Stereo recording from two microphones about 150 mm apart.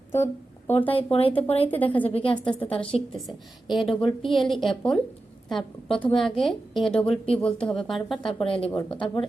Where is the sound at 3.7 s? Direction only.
Centre (ahead or behind).